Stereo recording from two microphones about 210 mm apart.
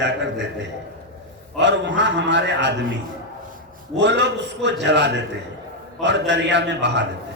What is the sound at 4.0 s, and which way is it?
A man's voice, 55° right (ahead or behind).